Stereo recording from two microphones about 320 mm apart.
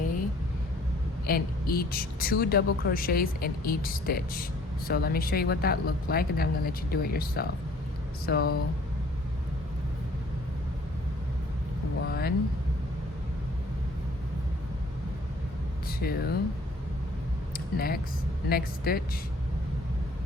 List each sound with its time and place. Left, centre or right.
1.3 s speech: left
12.0 s vehicle: left
15.9 s speech: left
17.5 s a sound: left
18.4 s speech: left